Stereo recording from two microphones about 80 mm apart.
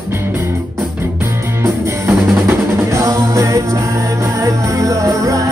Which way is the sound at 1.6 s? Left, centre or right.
Right.